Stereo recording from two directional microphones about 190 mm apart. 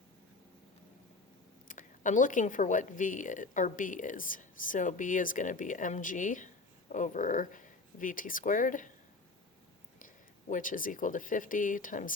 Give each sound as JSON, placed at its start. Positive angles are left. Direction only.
{"t": 1.6, "sound": "speech", "side_deg": 45}
{"t": 10.5, "sound": "speech", "side_deg": 45}